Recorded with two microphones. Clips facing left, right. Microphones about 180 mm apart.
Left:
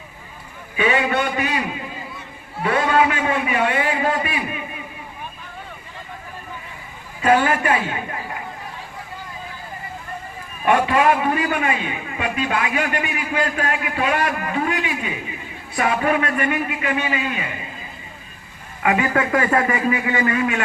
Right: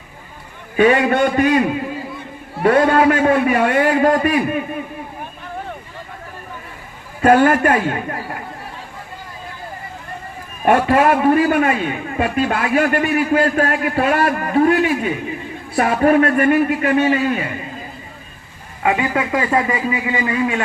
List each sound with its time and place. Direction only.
0.8 s a man's voice: 50° right (ahead or behind)
2.6 s a man's voice: 50° right (ahead or behind)
7.2 s a man's voice: 50° right (ahead or behind)
10.7 s a man's voice: 45° right (ahead or behind)
18.8 s a man's voice: 25° right (ahead or behind)